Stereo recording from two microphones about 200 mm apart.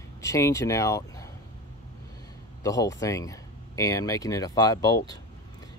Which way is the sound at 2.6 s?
15° left (ahead or behind).